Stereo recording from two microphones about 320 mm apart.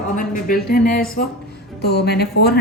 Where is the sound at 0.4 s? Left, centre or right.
Left.